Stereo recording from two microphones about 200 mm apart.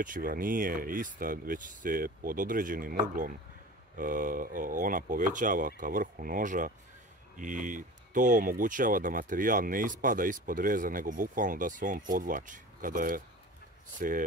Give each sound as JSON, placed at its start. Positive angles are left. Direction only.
{"t": 0.0, "sound": "speech", "side_deg": -45}